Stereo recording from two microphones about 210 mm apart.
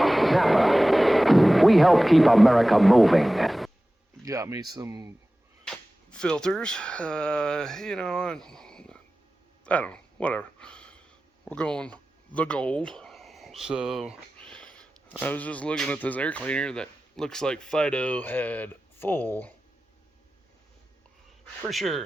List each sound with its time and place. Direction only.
0.0 s a sound: centre (ahead or behind)
4.2 s speech: 15° right (ahead or behind)
5.6 s speech: 5° left (ahead or behind)
9.6 s a sound: 5° left (ahead or behind)
15.2 s speech: 5° left (ahead or behind)
21.7 s speech: centre (ahead or behind)